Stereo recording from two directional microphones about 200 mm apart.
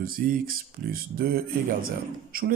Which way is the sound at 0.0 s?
45° right (ahead or behind).